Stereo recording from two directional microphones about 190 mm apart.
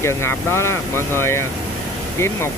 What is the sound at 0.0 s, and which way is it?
Speech, 15° left (ahead or behind).